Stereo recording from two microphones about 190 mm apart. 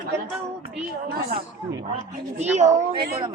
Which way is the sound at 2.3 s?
35° right (ahead or behind).